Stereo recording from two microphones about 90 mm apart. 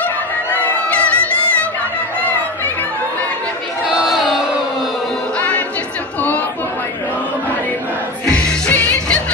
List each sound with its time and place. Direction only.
0.6 s crowd: 15° left (ahead or behind)
3.9 s crowd: 5° right (ahead or behind)
8.3 s music: 15° left (ahead or behind)